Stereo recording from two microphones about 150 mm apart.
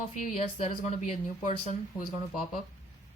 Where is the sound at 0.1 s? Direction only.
55° left (ahead or behind).